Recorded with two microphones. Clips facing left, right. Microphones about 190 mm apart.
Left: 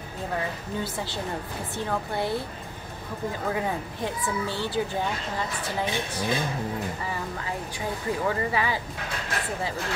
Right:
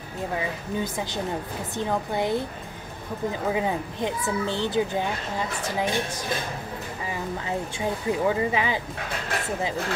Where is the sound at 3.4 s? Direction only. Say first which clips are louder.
Right 3 dB; 15° right (ahead or behind).